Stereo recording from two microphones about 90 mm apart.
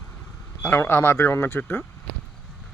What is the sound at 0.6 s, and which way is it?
Speech, 25° left (ahead or behind).